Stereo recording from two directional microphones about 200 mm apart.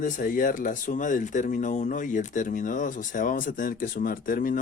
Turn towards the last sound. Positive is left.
turn(degrees=40)  # may be behind; listen again after turning